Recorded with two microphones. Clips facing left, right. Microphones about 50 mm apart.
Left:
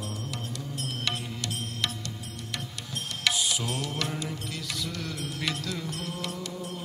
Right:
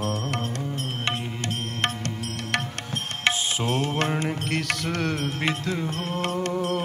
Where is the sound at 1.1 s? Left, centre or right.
Right.